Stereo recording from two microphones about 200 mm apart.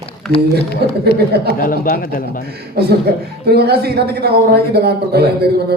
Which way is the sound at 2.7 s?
55° right (ahead or behind).